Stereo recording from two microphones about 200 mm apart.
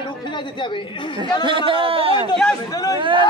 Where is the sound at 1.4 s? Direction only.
25° right (ahead or behind).